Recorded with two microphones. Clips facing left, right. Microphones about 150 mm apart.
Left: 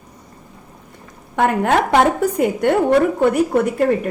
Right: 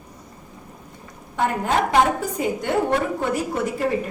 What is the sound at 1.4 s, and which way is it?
A woman's voice, 65° left (ahead or behind).